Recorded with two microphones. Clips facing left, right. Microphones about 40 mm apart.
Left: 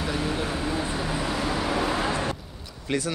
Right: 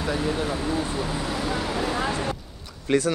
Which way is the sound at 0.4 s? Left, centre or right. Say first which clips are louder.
Right 2 dB; centre.